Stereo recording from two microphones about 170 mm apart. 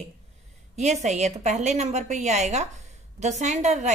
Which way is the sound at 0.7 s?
45° right (ahead or behind).